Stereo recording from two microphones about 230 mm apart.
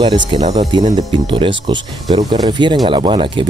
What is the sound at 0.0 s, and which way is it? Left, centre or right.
Speech, right.